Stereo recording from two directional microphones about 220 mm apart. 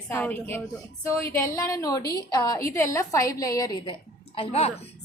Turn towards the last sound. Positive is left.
turn(degrees=30)  # may be behind; listen again after turning